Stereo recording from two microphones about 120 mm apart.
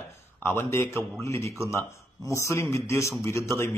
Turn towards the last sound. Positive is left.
turn(degrees=25)  # may be behind; listen again after turning